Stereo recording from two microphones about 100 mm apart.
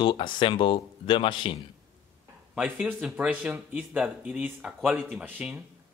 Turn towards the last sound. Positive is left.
turn(degrees=-15)  # may be behind; listen again after turning